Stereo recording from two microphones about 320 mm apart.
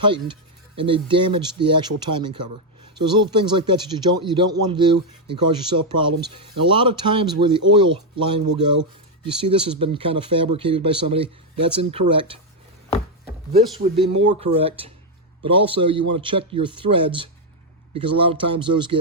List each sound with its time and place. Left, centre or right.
0.0 s speech: centre
13.5 s speech: centre